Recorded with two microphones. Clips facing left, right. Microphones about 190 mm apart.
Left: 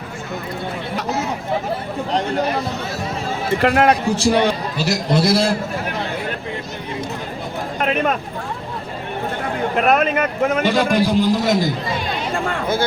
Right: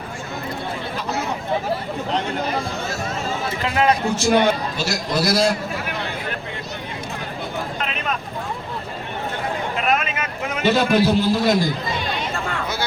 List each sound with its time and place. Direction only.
3.6 s a man's voice: 65° left (ahead or behind)
4.2 s a man's voice: 35° left (ahead or behind)
7.8 s a sound: 55° left (ahead or behind)
9.7 s a man's voice: 60° left (ahead or behind)
10.7 s a man's voice: 15° left (ahead or behind)